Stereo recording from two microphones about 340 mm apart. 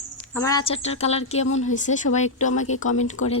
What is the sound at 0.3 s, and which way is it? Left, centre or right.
Speech, centre.